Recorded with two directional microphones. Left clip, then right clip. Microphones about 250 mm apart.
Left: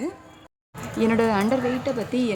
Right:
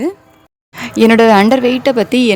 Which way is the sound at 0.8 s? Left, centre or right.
Right.